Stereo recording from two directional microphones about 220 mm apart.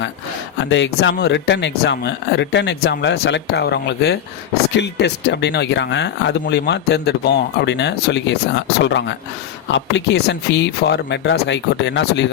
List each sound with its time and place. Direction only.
0.6 s speech: 55° left (ahead or behind)